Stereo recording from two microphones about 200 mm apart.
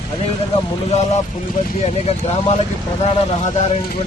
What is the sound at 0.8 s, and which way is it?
Speech, 30° left (ahead or behind).